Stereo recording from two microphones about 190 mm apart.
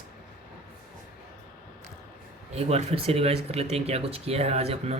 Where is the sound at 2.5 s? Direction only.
35° right (ahead or behind).